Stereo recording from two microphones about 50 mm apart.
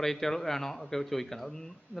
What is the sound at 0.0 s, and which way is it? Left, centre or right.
Speech, centre.